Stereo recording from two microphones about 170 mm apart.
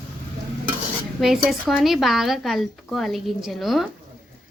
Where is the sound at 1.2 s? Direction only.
Centre (ahead or behind).